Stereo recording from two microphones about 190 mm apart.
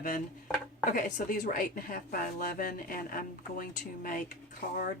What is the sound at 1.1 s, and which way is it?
Speech, 50° left (ahead or behind).